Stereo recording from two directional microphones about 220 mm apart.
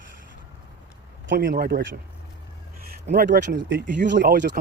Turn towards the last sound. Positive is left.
turn(degrees=-50)  # may be behind; listen again after turning